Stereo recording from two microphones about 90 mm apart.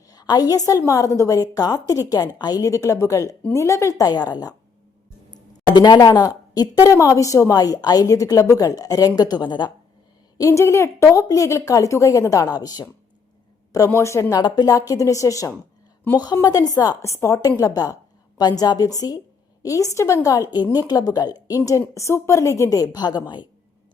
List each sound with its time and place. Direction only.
0.1 s a woman's voice: 45° left (ahead or behind)
10.3 s a woman's voice: 35° left (ahead or behind)
13.7 s a woman's voice: 35° left (ahead or behind)
14.4 s a woman's voice: 45° left (ahead or behind)